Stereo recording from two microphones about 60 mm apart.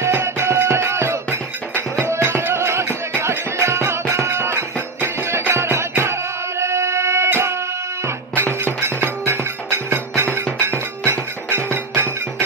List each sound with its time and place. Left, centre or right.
0.0 s music: right
8.8 s music: right